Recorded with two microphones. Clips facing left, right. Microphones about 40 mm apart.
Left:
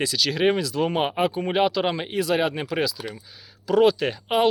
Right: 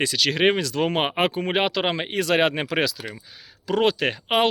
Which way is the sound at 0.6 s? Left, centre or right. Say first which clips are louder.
Even; right.